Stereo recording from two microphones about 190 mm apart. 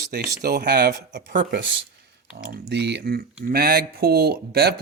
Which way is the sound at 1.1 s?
45° right (ahead or behind).